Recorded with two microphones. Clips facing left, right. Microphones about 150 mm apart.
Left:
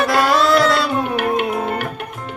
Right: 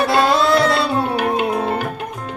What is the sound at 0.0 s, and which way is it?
Music, 25° right (ahead or behind).